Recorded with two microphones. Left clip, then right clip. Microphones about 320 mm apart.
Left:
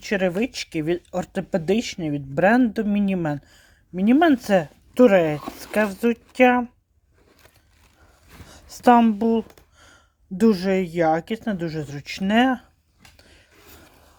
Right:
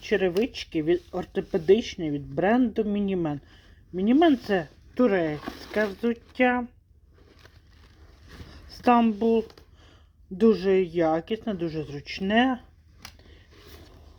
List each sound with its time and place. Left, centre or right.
0.0 s speech: left
8.4 s speech: left